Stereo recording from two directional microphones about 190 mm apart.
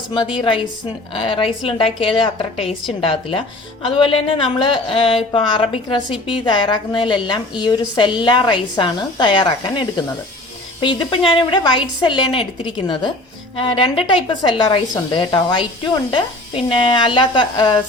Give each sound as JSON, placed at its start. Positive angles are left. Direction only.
{"t": 0.1, "sound": "a woman's voice", "side_deg": 25}